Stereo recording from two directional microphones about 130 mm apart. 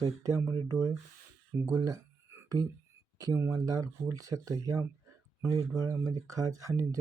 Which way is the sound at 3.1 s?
25° right (ahead or behind).